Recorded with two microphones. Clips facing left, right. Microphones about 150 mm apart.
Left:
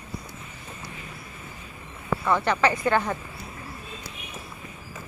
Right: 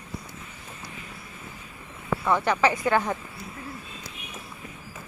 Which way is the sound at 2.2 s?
10° right (ahead or behind).